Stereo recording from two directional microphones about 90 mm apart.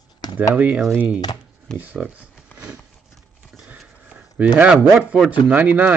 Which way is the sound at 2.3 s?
10° right (ahead or behind).